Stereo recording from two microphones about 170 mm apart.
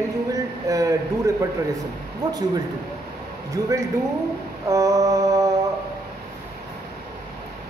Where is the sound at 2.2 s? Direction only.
25° right (ahead or behind).